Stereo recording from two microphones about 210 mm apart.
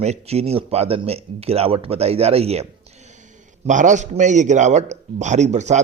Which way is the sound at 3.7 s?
35° right (ahead or behind).